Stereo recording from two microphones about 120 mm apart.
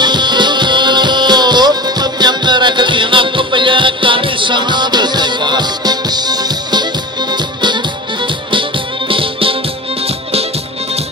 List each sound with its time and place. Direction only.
0.0 s music: 40° right (ahead or behind)